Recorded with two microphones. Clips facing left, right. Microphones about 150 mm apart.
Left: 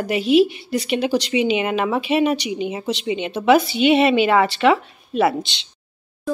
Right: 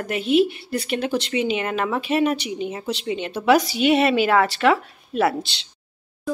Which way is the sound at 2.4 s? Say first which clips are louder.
Left 3 dB; 90° left.